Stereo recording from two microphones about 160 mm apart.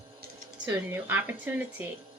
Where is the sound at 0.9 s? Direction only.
15° right (ahead or behind).